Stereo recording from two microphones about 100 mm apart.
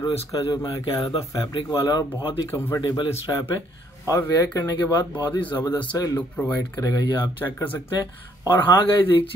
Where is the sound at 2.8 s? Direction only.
45° left (ahead or behind).